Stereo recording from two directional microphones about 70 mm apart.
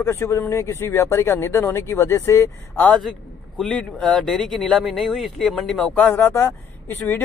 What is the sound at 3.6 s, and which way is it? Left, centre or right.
Speech, centre.